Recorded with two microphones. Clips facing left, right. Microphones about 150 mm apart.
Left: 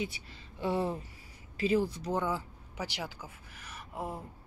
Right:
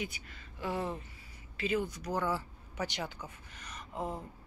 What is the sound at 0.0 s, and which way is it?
A woman's voice, 30° left (ahead or behind).